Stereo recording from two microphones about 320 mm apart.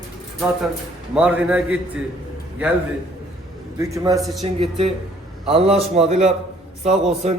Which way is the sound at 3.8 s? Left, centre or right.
Centre.